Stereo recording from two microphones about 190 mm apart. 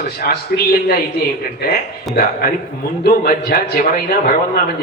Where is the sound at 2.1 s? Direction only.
50° left (ahead or behind).